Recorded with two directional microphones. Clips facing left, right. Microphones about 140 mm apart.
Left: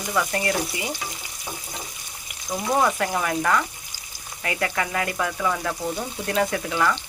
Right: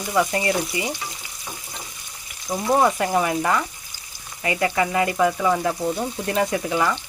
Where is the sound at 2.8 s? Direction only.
15° right (ahead or behind).